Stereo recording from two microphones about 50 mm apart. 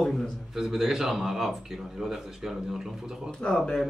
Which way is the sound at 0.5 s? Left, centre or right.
Centre.